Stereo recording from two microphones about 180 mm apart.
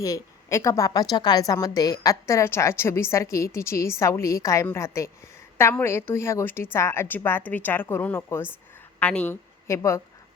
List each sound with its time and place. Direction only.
0.0 s a woman's voice: 15° left (ahead or behind)